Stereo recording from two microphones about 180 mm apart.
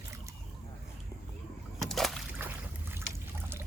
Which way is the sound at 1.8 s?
Centre (ahead or behind).